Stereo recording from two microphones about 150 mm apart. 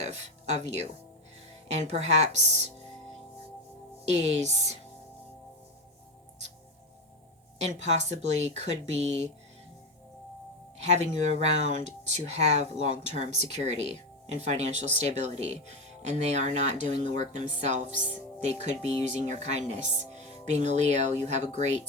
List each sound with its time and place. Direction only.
0.0 s speech: 50° right (ahead or behind)
4.0 s speech: 45° right (ahead or behind)
7.6 s speech: 50° right (ahead or behind)
10.8 s speech: 45° right (ahead or behind)